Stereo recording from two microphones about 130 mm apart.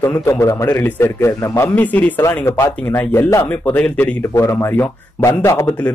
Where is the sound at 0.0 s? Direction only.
20° left (ahead or behind).